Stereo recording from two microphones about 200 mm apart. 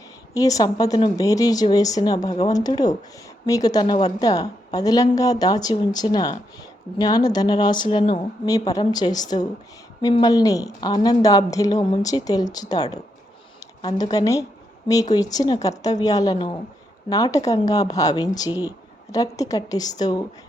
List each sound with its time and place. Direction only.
0.3 s a woman's voice: 15° left (ahead or behind)
14.1 s a woman's voice: 15° left (ahead or behind)